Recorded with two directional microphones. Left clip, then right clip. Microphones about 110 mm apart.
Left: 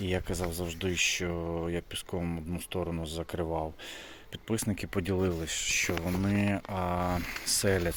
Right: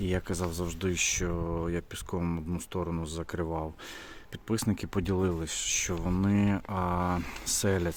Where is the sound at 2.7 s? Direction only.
30° right (ahead or behind).